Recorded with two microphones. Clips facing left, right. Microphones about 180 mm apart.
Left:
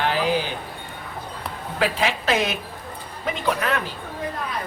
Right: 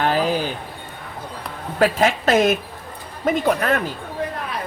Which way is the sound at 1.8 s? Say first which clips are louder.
Right 6 dB; 45° right (ahead or behind).